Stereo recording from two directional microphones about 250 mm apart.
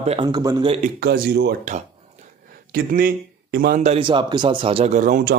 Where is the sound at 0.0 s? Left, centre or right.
Right.